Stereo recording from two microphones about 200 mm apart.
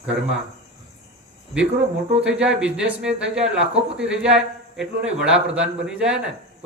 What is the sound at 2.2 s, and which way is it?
Speech, 5° right (ahead or behind).